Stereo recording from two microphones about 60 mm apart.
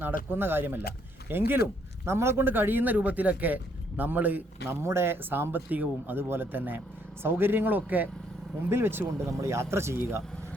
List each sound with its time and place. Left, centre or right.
0.0 s speech: right
4.7 s speech: right
9.4 s speech: right